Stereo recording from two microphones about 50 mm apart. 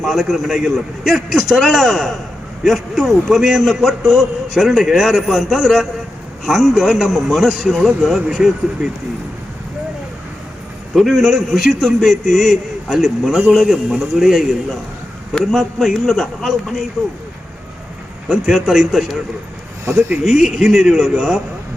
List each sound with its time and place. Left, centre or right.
0.0 s a man's voice: centre
10.9 s a man's voice: centre
18.3 s speech: centre
20.2 s speech: centre